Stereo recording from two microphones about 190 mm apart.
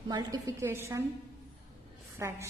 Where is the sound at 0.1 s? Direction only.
20° right (ahead or behind).